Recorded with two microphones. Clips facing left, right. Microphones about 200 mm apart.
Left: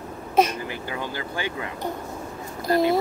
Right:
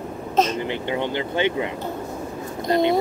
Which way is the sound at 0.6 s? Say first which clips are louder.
Right 6 dB; 25° right (ahead or behind).